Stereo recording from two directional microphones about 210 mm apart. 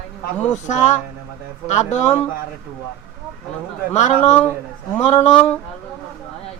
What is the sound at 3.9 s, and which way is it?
Speech, 35° left (ahead or behind).